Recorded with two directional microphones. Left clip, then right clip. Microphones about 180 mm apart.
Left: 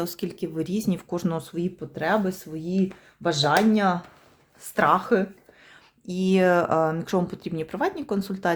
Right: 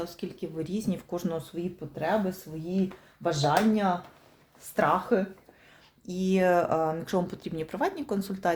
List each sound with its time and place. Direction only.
0.0 s speech: 60° left (ahead or behind); by 8.5 s 25° left (ahead or behind)